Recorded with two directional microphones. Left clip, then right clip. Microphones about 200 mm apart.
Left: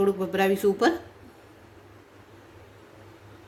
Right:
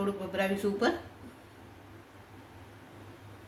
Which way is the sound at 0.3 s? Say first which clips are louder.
Left 7 dB; 60° left (ahead or behind).